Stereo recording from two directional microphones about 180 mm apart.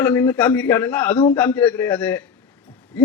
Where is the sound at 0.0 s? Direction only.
15° left (ahead or behind).